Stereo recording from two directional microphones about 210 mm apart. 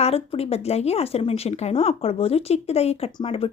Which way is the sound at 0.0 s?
30° left (ahead or behind).